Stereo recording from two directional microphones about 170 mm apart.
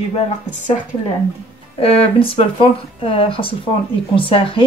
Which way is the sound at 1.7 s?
35° left (ahead or behind).